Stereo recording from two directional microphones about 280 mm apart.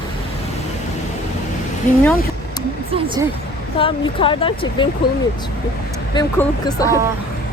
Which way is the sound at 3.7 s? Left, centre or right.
Centre.